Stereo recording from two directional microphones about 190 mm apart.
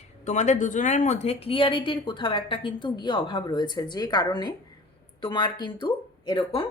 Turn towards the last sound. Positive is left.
turn(degrees=25)  # may be behind; listen again after turning